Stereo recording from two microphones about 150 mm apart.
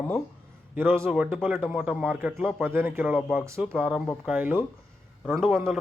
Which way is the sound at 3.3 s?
20° right (ahead or behind).